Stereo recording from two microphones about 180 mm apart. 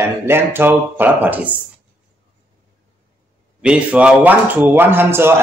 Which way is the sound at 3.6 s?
5° right (ahead or behind).